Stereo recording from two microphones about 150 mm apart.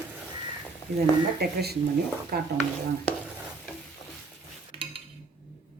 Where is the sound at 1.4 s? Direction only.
90° right.